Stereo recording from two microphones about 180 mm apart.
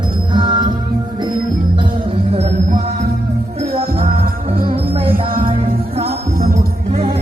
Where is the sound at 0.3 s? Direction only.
25° right (ahead or behind).